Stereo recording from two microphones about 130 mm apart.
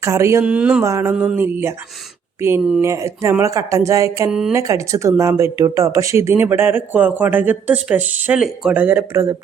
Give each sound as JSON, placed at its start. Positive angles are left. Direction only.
{"t": 0.0, "sound": "speech", "side_deg": -20}
{"t": 0.4, "sound": "speech", "side_deg": -10}
{"t": 0.8, "sound": "speech", "side_deg": -20}
{"t": 1.1, "sound": "speech", "side_deg": -5}
{"t": 1.4, "sound": "speech", "side_deg": -20}
{"t": 2.8, "sound": "speech", "side_deg": -25}
{"t": 4.3, "sound": "speech", "side_deg": -5}
{"t": 4.5, "sound": "speech", "side_deg": -25}